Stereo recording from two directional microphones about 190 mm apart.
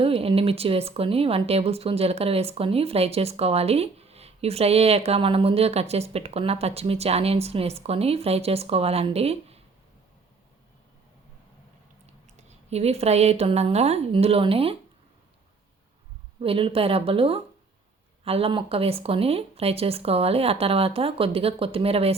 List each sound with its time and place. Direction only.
0.0 s speech: 30° right (ahead or behind)
12.4 s speech: 35° right (ahead or behind)
16.4 s speech: 30° right (ahead or behind)